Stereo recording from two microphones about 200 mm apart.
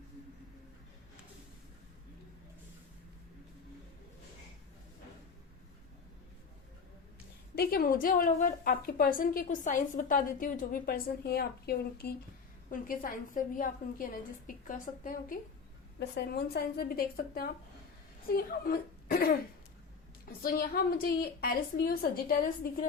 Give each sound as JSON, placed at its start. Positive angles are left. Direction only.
{"t": 7.5, "sound": "a woman's voice", "side_deg": 50}
{"t": 16.0, "sound": "a woman's voice", "side_deg": 55}